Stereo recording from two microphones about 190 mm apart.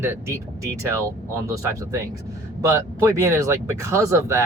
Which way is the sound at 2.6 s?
15° right (ahead or behind).